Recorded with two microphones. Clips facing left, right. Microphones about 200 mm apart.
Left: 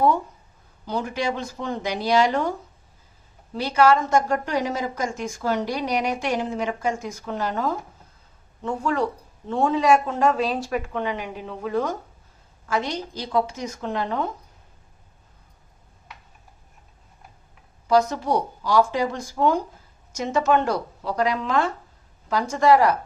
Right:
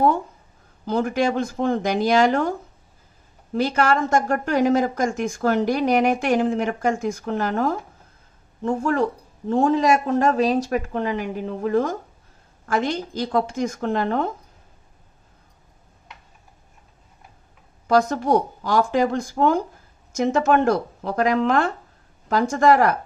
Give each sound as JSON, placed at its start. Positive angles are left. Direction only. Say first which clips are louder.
{"t": 0.9, "sound": "a woman's voice", "louder": "right 5 dB", "side_deg": -50}
{"t": 3.5, "sound": "a woman's voice", "louder": "left 1 dB", "side_deg": -50}
{"t": 17.8, "sound": "a woman's voice", "louder": "right 2 dB", "side_deg": -55}